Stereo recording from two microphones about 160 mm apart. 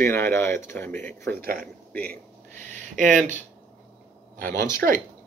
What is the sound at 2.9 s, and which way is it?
Speech, 50° right (ahead or behind).